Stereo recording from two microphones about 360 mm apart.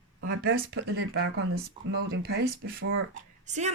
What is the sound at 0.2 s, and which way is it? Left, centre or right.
Speech, right.